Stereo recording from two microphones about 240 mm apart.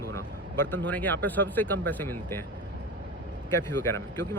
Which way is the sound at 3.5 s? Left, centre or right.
Centre.